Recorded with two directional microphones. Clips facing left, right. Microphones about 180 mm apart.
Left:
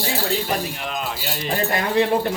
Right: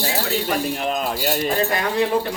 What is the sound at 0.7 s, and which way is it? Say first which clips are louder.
Speech: right 5 dB; 40° right (ahead or behind).